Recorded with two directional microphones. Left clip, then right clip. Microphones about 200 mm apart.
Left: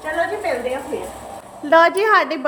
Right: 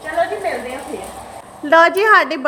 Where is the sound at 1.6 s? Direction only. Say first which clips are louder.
Right 2 dB; 5° right (ahead or behind).